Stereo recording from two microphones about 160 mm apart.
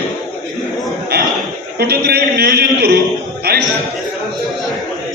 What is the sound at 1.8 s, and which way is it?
A man's voice, 75° right (ahead or behind).